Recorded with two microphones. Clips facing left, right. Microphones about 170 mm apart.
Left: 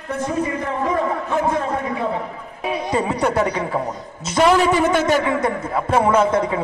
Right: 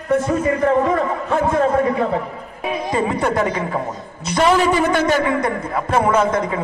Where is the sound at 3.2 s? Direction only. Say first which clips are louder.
Even; 5° left (ahead or behind).